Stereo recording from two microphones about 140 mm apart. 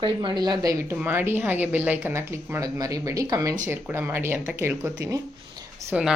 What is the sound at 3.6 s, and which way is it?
A woman's voice, 15° right (ahead or behind).